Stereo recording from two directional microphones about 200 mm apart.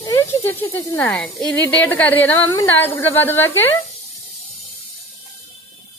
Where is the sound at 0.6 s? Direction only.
10° left (ahead or behind).